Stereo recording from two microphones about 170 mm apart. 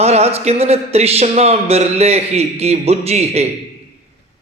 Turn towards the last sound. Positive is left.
turn(degrees=-40)  # may be behind; listen again after turning